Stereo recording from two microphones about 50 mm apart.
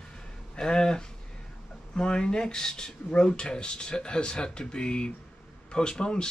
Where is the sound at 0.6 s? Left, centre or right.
Centre.